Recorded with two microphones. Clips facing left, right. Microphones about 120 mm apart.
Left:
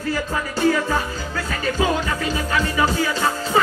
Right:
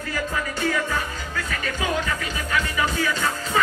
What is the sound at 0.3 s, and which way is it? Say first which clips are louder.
Music: left 6 dB; 35° left (ahead or behind).